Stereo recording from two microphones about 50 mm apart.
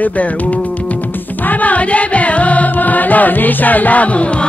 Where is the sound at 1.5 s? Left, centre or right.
Left.